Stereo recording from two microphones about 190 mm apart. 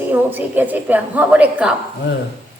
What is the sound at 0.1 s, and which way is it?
A woman's voice, 10° right (ahead or behind).